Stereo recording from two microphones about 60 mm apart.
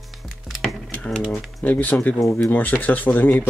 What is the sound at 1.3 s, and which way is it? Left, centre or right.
Typing, centre.